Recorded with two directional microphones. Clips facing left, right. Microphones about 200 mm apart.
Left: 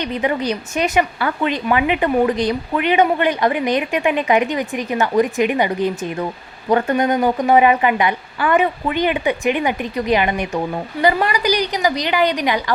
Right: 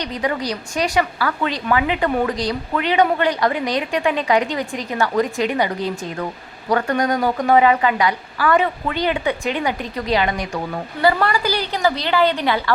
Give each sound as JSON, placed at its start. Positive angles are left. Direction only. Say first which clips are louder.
{"t": 0.2, "sound": "a woman's voice", "louder": "left 2 dB", "side_deg": 20}